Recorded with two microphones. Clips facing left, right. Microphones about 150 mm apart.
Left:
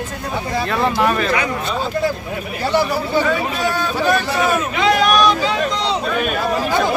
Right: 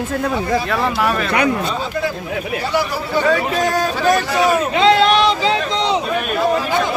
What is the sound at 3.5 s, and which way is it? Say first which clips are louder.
Speech: right 3 dB; 45° right (ahead or behind).